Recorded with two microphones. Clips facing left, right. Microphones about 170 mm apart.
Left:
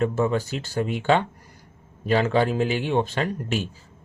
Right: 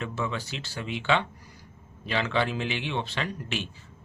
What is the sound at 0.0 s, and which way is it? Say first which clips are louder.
Speech: left 10 dB; 45° left (ahead or behind).